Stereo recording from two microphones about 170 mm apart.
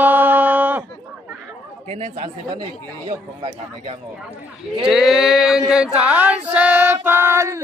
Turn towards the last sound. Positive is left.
turn(degrees=-15)  # may be behind; listen again after turning